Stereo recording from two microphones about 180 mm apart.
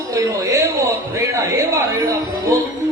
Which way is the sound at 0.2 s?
15° right (ahead or behind).